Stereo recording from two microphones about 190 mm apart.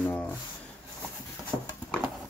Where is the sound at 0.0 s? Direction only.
10° left (ahead or behind).